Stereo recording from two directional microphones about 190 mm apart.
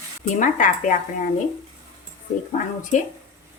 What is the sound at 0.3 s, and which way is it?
Speech, 40° left (ahead or behind).